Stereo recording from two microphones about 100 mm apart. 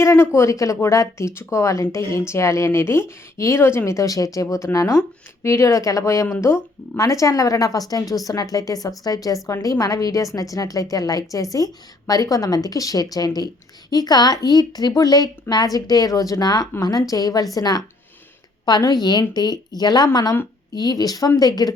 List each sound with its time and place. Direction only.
0.0 s a woman's voice: 30° left (ahead or behind)